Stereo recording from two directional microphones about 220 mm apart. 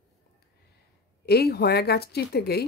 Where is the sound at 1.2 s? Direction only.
45° left (ahead or behind).